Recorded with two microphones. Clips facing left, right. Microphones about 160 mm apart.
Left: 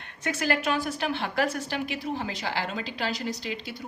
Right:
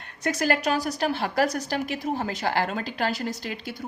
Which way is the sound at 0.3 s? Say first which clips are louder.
Right 3 dB; 40° right (ahead or behind).